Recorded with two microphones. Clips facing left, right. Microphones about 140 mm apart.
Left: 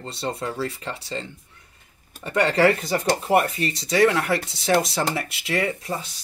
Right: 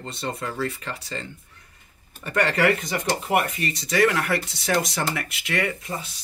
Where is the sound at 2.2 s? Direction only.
25° left (ahead or behind).